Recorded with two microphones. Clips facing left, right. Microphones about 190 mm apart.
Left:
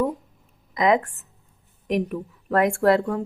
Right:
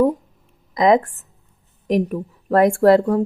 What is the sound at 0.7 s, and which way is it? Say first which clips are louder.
A woman's voice: right 5 dB; 35° right (ahead or behind).